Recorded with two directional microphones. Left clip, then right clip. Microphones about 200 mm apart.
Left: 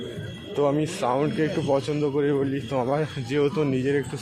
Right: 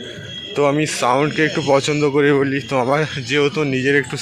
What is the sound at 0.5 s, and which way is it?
Speech, 15° right (ahead or behind).